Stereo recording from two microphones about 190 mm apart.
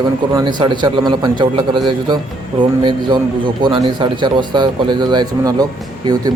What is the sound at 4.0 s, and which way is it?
Speech, 25° right (ahead or behind).